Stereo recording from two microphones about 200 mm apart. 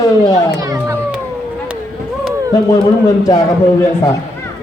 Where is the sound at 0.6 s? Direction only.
15° right (ahead or behind).